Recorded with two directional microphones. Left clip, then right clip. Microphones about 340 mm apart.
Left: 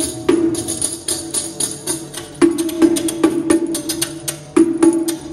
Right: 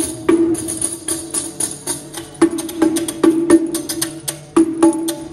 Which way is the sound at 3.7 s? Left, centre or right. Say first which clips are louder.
Even; centre.